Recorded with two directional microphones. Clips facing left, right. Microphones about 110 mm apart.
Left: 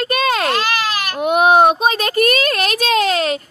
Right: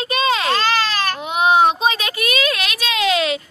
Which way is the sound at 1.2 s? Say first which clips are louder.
Left 4 dB; 50° left (ahead or behind).